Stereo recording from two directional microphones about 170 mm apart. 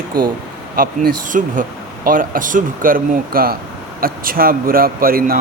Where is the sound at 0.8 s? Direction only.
55° right (ahead or behind).